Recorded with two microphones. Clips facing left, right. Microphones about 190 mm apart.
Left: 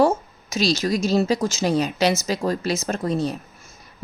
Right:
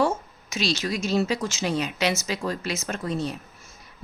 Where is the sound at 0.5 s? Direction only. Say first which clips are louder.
Left 6 dB; 35° left (ahead or behind).